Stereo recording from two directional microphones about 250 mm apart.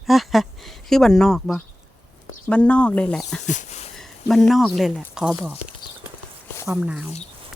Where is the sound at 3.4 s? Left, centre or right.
Left.